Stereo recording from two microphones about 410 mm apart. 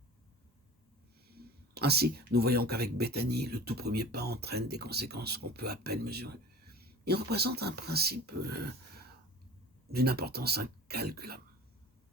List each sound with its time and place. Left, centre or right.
1.4 s speech: right